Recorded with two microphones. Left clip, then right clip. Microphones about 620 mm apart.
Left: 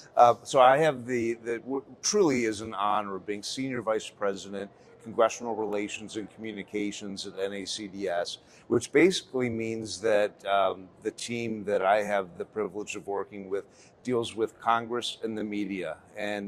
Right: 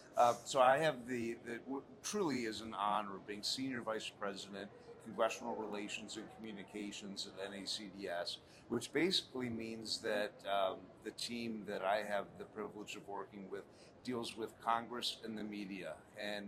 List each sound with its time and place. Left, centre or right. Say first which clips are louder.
0.2 s speech: left 12 dB; left